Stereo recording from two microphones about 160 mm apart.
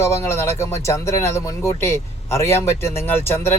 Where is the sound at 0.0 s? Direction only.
15° left (ahead or behind).